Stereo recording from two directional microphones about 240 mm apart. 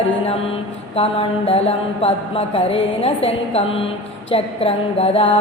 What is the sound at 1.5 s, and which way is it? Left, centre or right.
A woman's voice, left.